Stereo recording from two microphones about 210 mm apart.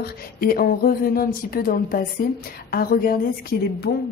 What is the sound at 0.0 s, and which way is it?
A woman's voice, 45° left (ahead or behind).